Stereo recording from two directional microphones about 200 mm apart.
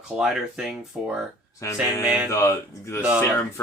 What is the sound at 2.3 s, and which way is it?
Speech, 15° left (ahead or behind).